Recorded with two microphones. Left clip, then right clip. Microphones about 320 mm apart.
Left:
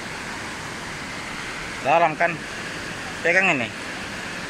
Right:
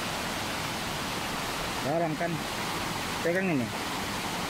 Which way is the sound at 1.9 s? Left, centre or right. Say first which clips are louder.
Left 13 dB; left.